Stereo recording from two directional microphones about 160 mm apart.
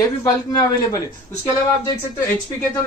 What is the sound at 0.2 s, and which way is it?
Speech, 20° left (ahead or behind).